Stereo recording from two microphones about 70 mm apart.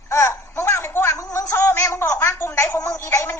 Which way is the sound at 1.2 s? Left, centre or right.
Left.